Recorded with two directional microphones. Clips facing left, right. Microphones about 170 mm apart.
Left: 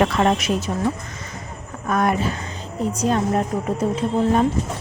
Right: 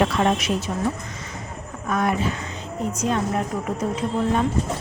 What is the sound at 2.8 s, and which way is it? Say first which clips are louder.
Speech: left 3 dB; 35° left (ahead or behind).